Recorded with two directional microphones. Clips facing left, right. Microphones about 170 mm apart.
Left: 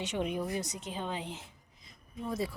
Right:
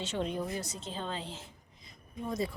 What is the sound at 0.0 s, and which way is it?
A woman's voice, 15° left (ahead or behind).